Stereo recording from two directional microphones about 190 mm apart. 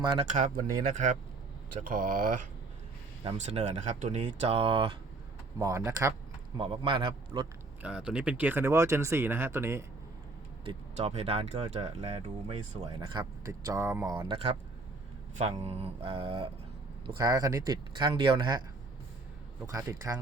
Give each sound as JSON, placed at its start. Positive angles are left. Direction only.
{"t": 0.0, "sound": "speech", "side_deg": -25}
{"t": 0.3, "sound": "speech", "side_deg": -40}
{"t": 3.2, "sound": "speech", "side_deg": -35}
{"t": 5.5, "sound": "speech", "side_deg": -15}
{"t": 6.6, "sound": "speech", "side_deg": -30}
{"t": 7.8, "sound": "speech", "side_deg": -5}
{"t": 10.7, "sound": "speech", "side_deg": -35}
{"t": 13.1, "sound": "speech", "side_deg": -20}
{"t": 15.6, "sound": "speech", "side_deg": -30}
{"t": 19.6, "sound": "speech", "side_deg": -20}